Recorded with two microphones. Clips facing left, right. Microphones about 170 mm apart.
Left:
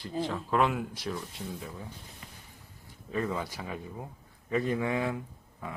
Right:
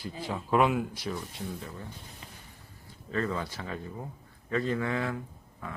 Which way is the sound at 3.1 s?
10° left (ahead or behind).